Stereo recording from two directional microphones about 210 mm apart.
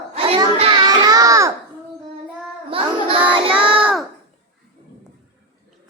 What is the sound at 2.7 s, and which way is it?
Child singing, 25° right (ahead or behind).